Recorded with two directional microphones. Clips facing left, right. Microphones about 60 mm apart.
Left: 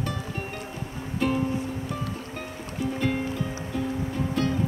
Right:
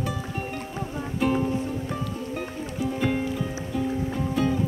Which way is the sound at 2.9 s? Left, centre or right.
Centre.